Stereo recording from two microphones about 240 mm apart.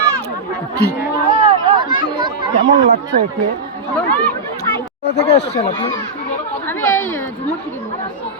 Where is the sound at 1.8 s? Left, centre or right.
Centre.